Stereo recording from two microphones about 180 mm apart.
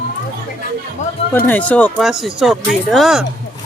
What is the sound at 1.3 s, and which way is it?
Speech, 10° left (ahead or behind).